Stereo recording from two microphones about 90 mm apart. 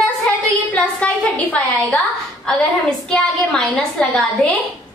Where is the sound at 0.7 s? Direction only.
15° left (ahead or behind).